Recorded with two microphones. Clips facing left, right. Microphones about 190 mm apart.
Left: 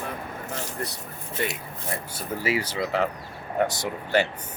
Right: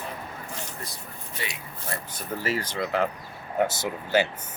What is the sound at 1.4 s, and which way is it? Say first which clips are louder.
Speech: left 8 dB; 50° left (ahead or behind).